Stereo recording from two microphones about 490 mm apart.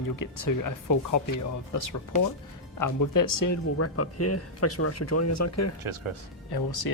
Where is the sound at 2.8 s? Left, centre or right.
Left.